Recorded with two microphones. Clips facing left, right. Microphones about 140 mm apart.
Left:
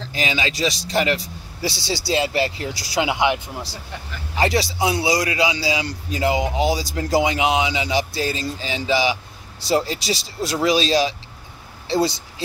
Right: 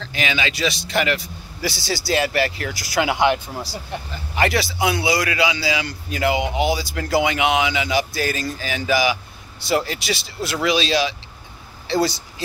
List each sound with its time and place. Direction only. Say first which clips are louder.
0.0 s speech: even; 35° left (ahead or behind); by 3.7 s 20° left (ahead or behind)
4.4 s a man's voice: even; 30° left (ahead or behind)
11.9 s speech: even; 25° left (ahead or behind)